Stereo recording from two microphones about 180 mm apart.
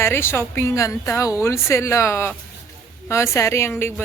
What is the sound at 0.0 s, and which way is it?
A woman's voice, 15° left (ahead or behind).